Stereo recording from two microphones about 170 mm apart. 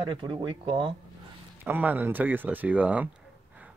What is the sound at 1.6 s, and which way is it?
Speech, 10° right (ahead or behind).